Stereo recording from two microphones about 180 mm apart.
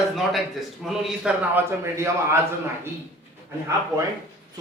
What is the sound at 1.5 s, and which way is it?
Speech, 15° right (ahead or behind).